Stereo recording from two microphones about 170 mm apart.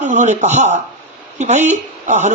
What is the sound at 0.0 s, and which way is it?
Speech, 45° right (ahead or behind).